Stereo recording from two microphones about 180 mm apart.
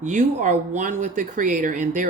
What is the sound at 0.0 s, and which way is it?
Speech, 45° right (ahead or behind).